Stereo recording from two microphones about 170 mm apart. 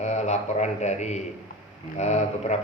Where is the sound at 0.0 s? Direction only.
45° left (ahead or behind).